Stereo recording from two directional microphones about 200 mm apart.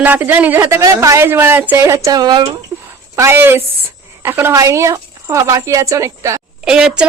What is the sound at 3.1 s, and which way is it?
Speech, 15° right (ahead or behind).